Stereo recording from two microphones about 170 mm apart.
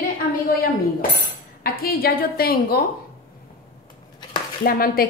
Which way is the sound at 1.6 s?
60° left (ahead or behind).